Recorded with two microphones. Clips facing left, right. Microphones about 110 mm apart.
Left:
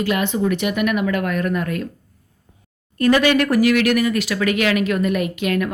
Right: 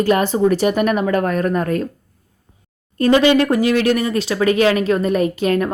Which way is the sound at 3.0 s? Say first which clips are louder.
Right 3 dB; 25° right (ahead or behind).